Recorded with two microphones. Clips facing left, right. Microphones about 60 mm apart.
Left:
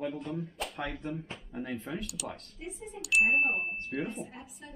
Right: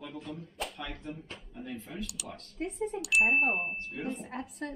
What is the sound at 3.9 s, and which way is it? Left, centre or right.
Speech, left.